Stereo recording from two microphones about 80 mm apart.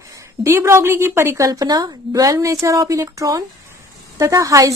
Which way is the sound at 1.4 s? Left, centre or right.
Right.